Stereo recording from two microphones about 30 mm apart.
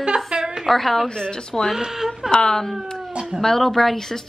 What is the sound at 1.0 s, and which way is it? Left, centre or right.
Speech, left.